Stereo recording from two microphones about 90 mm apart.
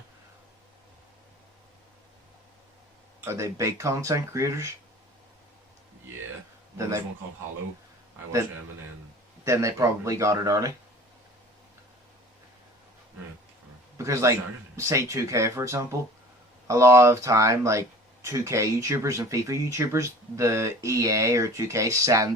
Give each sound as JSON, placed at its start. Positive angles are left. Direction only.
{"t": 3.2, "sound": "speech", "side_deg": -30}
{"t": 9.4, "sound": "speech", "side_deg": -35}
{"t": 14.0, "sound": "speech", "side_deg": -35}